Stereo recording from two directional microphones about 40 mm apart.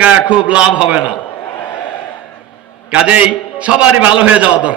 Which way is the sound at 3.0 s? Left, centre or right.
Right.